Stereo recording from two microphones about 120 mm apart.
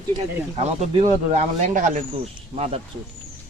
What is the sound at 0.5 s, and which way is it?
Speech, 60° right (ahead or behind).